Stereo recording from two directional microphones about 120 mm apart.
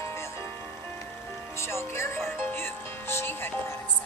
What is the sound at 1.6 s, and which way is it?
Music, 20° left (ahead or behind).